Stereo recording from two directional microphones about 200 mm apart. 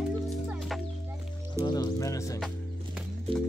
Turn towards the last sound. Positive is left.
turn(degrees=-30)  # may be behind; listen again after turning